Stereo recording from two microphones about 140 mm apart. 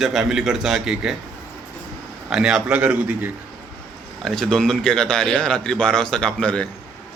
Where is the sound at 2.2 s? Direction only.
5° right (ahead or behind).